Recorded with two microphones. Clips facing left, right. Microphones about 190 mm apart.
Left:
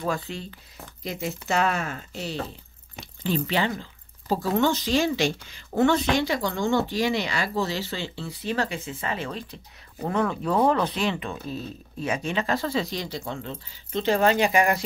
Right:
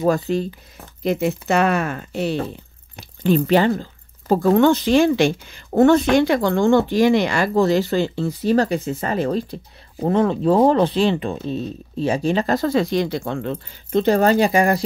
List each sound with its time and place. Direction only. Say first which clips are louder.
0.0 s speech: right 11 dB; 40° right (ahead or behind)
1.0 s speech: right 11 dB; 60° right (ahead or behind)
3.3 s speech: right 9 dB; 50° right (ahead or behind)
14.0 s speech: right 4 dB; 40° right (ahead or behind)